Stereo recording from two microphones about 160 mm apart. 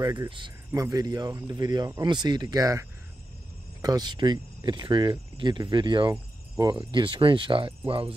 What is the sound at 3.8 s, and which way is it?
Speech, 25° right (ahead or behind).